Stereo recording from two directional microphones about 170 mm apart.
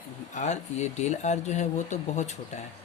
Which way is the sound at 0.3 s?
45° left (ahead or behind).